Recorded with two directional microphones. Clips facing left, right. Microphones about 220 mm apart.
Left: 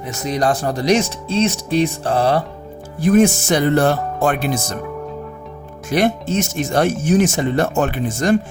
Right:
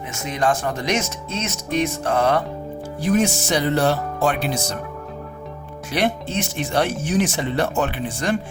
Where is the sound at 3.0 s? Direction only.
50° left (ahead or behind).